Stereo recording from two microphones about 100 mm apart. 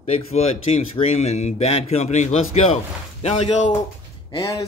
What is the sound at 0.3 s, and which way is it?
Speech, 90° left.